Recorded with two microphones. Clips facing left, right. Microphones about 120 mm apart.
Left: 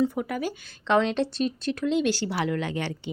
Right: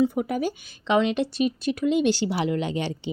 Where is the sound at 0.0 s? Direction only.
20° right (ahead or behind).